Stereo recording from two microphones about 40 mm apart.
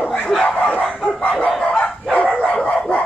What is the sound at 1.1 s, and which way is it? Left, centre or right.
Dog, left.